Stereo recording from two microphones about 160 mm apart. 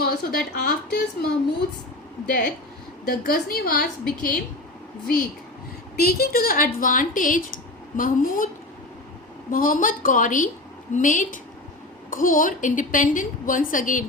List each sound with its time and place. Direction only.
0.0 s a woman's voice: 75° left (ahead or behind)
2.2 s a woman's voice: 60° left (ahead or behind)
6.0 s speech: 75° left (ahead or behind); by 8.4 s 60° left (ahead or behind)
9.5 s speech: 60° left (ahead or behind)